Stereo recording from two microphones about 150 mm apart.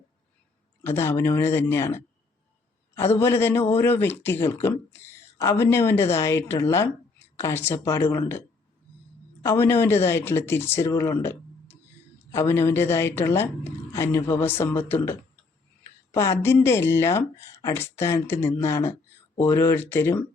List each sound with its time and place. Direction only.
0.8 s speech: 15° left (ahead or behind)
3.2 s speech: 15° left (ahead or behind)
9.4 s speech: 15° left (ahead or behind)
11.2 s a sound: 15° left (ahead or behind)
12.3 s speech: 15° left (ahead or behind)
16.1 s speech: 20° left (ahead or behind)